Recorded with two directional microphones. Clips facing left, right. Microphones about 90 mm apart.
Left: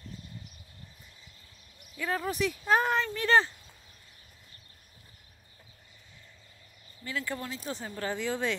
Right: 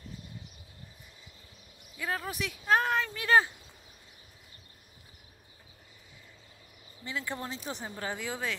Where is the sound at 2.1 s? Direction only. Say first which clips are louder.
Left 6 dB; centre (ahead or behind).